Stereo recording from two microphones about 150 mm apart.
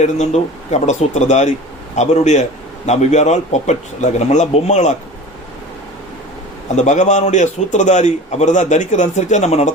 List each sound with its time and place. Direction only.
0.0 s a man's voice: 50° left (ahead or behind)
6.7 s a man's voice: 50° left (ahead or behind)